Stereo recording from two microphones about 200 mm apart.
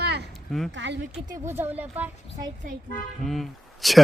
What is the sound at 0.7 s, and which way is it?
Speech, 65° right (ahead or behind).